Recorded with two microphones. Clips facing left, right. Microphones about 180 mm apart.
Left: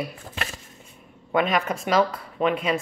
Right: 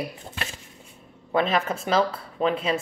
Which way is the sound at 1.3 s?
30° right (ahead or behind).